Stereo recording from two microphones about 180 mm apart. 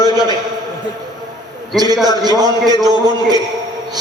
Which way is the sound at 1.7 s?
20° right (ahead or behind).